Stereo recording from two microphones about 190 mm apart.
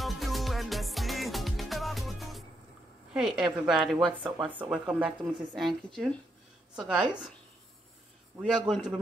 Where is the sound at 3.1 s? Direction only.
Centre (ahead or behind).